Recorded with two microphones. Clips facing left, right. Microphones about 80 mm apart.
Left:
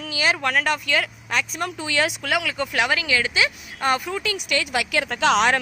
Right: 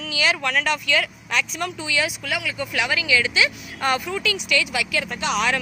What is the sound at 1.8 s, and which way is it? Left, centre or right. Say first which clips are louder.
Speech: left 3 dB; left.